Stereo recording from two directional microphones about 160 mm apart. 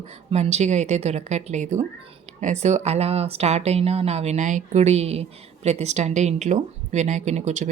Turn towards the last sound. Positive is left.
turn(degrees=-45)  # may be behind; listen again after turning